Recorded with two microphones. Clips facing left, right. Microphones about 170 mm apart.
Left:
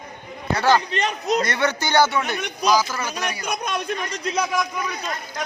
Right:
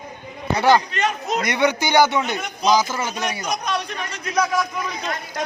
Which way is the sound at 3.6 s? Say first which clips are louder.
Even; 45° left (ahead or behind).